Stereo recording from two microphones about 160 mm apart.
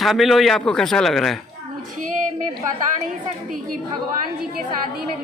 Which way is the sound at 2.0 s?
55° right (ahead or behind).